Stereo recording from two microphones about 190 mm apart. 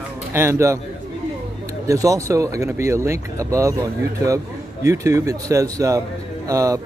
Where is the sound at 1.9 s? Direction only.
15° right (ahead or behind).